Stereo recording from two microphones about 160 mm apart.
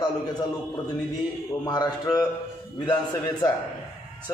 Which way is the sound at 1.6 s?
25° left (ahead or behind).